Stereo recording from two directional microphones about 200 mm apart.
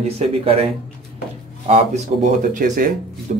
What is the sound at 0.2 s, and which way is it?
Speech, 30° right (ahead or behind).